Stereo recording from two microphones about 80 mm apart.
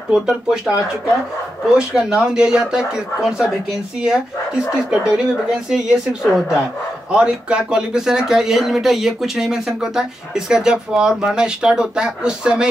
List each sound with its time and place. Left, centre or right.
0.1 s speech: centre
7.1 s speech: centre